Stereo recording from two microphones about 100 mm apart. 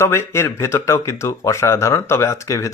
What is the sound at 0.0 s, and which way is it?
Speech, 25° left (ahead or behind).